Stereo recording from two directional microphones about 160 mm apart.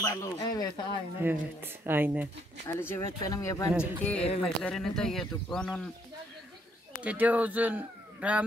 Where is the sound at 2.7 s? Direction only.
15° left (ahead or behind).